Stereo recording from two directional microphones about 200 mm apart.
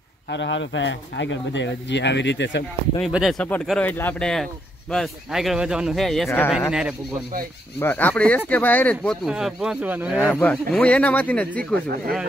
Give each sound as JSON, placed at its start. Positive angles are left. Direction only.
{"t": 0.3, "sound": "speech", "side_deg": 65}
{"t": 3.0, "sound": "speech", "side_deg": 0}
{"t": 7.8, "sound": "speech", "side_deg": 10}
{"t": 10.1, "sound": "speech", "side_deg": 10}